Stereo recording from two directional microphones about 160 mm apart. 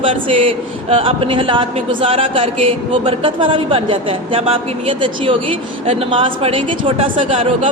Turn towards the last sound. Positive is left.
turn(degrees=-35)  # may be behind; listen again after turning